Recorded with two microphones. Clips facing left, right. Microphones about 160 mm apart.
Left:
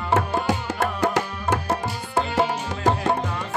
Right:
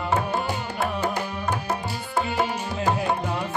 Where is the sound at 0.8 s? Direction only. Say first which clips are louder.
Left 1 dB; 90° left.